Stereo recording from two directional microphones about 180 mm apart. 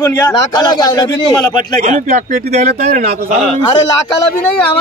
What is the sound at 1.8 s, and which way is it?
A man's voice, 45° right (ahead or behind).